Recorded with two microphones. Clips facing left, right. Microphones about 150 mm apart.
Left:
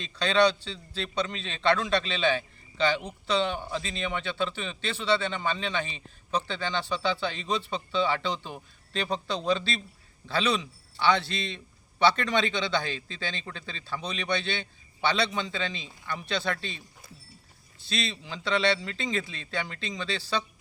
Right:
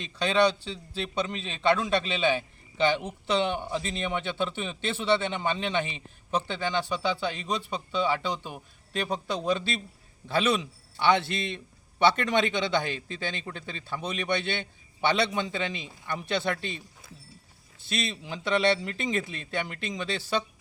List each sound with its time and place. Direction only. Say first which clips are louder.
0.0 s a man's voice: even; 10° right (ahead or behind)
17.8 s a man's voice: right 1 dB; 20° right (ahead or behind)